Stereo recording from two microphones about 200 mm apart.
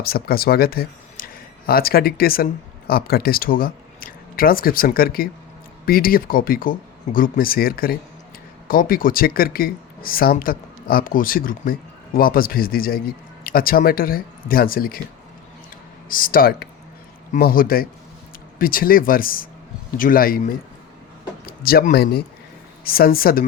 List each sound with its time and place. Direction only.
0.0 s speech: 50° left (ahead or behind)
16.0 s speech: 45° left (ahead or behind)